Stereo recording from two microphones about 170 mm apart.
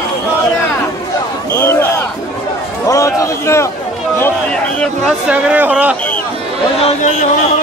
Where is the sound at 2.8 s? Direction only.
20° left (ahead or behind).